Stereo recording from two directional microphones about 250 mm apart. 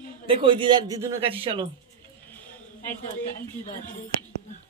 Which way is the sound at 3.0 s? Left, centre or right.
Left.